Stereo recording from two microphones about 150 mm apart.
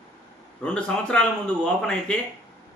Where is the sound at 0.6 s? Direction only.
10° left (ahead or behind).